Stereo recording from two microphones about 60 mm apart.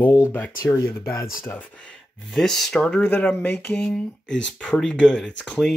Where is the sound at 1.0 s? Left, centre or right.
Left.